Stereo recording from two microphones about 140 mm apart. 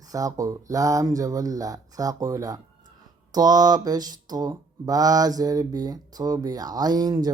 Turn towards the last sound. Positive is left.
turn(degrees=-30)  # may be behind; listen again after turning